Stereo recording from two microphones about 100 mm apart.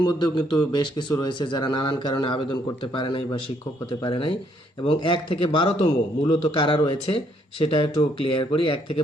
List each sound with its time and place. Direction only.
0.0 s a man's voice: 45° left (ahead or behind)